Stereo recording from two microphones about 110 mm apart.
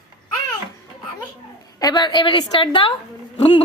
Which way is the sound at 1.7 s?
35° left (ahead or behind).